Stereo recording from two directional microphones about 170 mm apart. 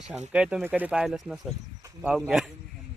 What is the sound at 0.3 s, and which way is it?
Speech, 5° right (ahead or behind).